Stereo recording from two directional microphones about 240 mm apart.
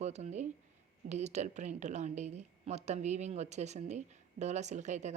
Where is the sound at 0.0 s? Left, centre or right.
Right.